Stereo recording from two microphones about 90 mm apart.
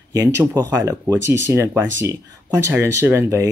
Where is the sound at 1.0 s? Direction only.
30° right (ahead or behind).